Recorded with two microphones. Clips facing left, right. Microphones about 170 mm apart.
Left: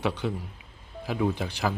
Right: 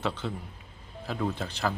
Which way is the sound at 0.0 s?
10° left (ahead or behind).